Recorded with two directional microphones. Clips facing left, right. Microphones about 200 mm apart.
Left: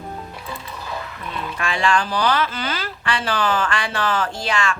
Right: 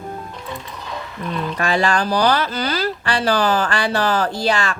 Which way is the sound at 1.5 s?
40° right (ahead or behind).